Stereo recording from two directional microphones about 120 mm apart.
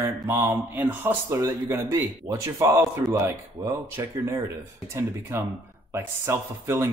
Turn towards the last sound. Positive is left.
turn(degrees=-25)  # may be behind; listen again after turning